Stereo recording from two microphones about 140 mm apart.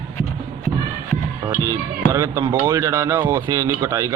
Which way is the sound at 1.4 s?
20° right (ahead or behind).